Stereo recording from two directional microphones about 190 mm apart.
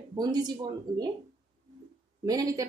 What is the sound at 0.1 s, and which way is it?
Speech, 20° right (ahead or behind).